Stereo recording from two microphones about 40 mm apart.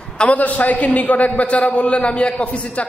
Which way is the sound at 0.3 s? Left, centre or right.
Left.